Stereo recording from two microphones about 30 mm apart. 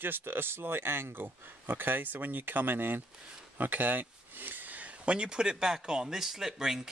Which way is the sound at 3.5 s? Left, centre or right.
Right.